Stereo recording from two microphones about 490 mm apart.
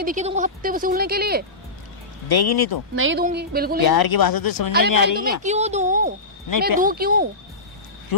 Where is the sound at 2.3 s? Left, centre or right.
Left.